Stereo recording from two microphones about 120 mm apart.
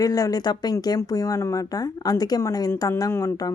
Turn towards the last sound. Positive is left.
turn(degrees=25)  # may be behind; listen again after turning